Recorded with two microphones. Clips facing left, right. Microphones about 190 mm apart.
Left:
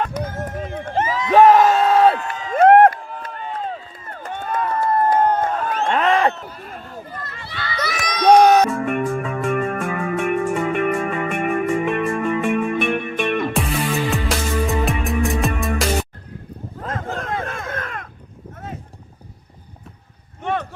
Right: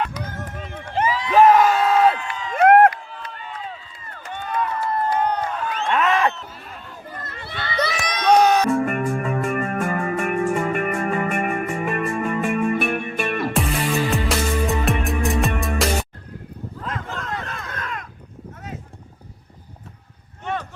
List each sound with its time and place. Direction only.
0.0 s a sound: 50° left (ahead or behind)
2.6 s crowd: 35° left (ahead or behind)
3.1 s run: 50° left (ahead or behind)
6.0 s a sound: 30° left (ahead or behind)
7.3 s children playing: 55° right (ahead or behind)
7.6 s crowd: 25° right (ahead or behind)
8.3 s music: 50° left (ahead or behind)
8.7 s music: centre (ahead or behind)
16.8 s a sound: 50° left (ahead or behind)